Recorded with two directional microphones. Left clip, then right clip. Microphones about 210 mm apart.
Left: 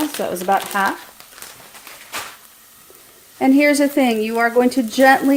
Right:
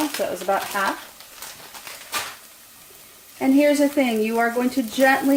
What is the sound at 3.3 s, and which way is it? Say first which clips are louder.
Speech: left 3 dB; 45° left (ahead or behind).